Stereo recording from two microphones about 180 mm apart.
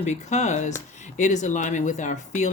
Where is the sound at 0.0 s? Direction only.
40° left (ahead or behind).